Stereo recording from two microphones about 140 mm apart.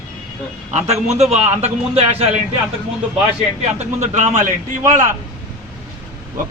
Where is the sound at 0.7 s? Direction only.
55° right (ahead or behind).